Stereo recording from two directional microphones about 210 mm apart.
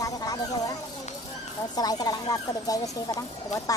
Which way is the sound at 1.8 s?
20° left (ahead or behind).